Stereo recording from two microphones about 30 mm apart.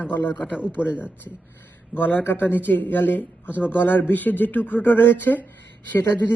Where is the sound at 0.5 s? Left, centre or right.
Right.